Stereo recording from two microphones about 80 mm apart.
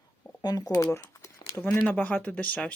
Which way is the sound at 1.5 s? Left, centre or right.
Left.